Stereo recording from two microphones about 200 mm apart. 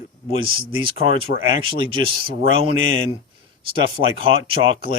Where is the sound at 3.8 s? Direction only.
25° right (ahead or behind).